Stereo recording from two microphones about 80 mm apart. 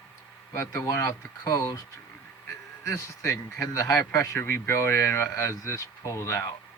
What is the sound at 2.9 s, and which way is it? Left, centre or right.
A man's voice, left.